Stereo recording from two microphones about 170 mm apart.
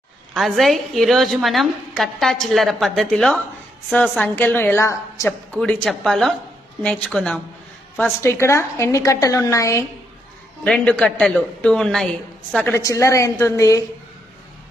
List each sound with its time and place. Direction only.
0.3 s a woman's voice: centre (ahead or behind); by 5.3 s 15° left (ahead or behind)
5.5 s a woman's voice: 5° left (ahead or behind)
8.2 s a woman's voice: 15° left (ahead or behind)
10.6 s a woman's voice: 5° left (ahead or behind)